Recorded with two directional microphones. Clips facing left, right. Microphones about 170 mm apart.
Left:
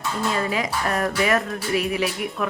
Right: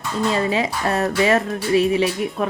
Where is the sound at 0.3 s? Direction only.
25° right (ahead or behind).